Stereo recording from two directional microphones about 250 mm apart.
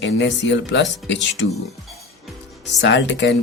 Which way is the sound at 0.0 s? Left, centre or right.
Left.